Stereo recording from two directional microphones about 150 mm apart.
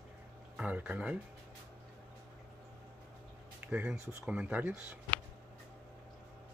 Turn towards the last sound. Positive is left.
turn(degrees=-10)  # may be behind; listen again after turning